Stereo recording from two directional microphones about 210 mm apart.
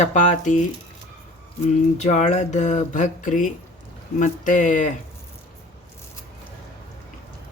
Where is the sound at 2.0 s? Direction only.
35° left (ahead or behind).